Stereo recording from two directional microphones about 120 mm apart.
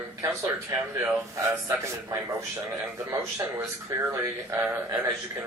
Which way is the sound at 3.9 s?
30° right (ahead or behind).